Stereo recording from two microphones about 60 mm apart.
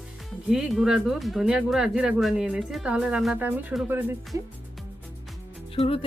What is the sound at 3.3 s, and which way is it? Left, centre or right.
Speech, right.